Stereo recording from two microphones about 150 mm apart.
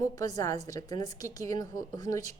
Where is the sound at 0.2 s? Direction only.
25° left (ahead or behind).